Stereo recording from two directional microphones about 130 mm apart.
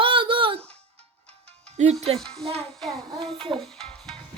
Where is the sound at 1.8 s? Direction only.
55° right (ahead or behind).